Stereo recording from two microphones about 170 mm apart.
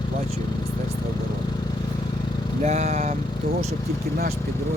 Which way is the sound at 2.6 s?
40° right (ahead or behind).